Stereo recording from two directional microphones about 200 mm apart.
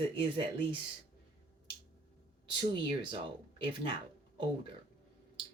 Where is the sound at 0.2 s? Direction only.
25° right (ahead or behind).